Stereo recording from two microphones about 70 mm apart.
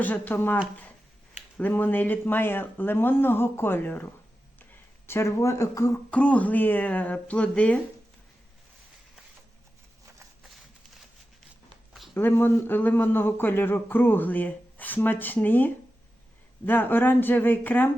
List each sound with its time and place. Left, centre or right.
0.0 s speech: left
5.0 s speech: left
6.1 s speech: centre
12.1 s speech: left